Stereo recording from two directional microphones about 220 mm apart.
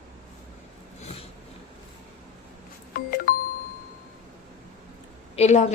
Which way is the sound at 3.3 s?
40° left (ahead or behind).